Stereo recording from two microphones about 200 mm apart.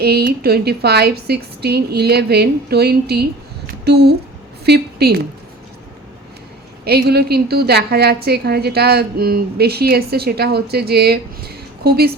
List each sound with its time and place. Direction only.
0.0 s a woman's voice: 50° right (ahead or behind)
3.7 s a sound: 55° right (ahead or behind)
4.6 s a woman's voice: 55° right (ahead or behind)
6.8 s a woman's voice: 50° right (ahead or behind)